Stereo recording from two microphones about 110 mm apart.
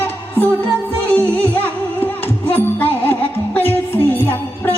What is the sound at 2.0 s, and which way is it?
Music, 20° left (ahead or behind).